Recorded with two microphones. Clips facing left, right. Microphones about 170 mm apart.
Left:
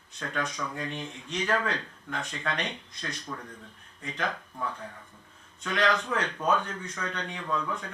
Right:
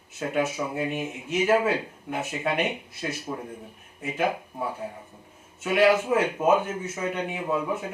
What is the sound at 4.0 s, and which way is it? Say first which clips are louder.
Speech: right 7 dB; 10° right (ahead or behind).